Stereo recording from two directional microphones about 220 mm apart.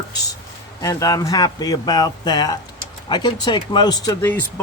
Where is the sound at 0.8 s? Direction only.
15° left (ahead or behind).